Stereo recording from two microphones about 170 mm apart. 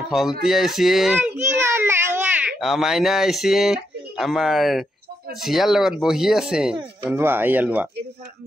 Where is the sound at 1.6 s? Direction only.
15° right (ahead or behind).